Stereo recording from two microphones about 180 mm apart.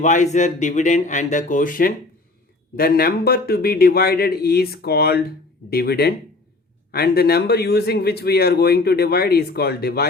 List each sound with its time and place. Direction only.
0.0 s a man's voice: 40° left (ahead or behind); by 10.1 s 60° left (ahead or behind)